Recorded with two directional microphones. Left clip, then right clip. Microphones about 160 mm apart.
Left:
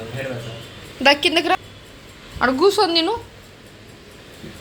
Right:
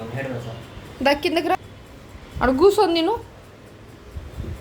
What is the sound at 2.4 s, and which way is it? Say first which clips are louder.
Speech: even; 20° right (ahead or behind).